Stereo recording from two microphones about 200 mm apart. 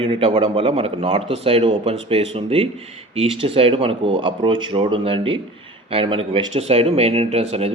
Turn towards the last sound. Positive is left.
turn(degrees=-30)  # may be behind; listen again after turning